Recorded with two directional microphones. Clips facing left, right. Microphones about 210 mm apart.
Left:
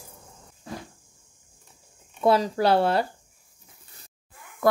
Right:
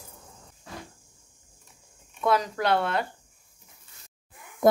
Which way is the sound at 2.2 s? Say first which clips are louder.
Left 4 dB; 30° left (ahead or behind).